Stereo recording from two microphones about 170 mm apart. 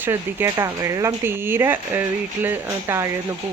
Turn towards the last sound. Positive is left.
turn(degrees=-15)  # may be behind; listen again after turning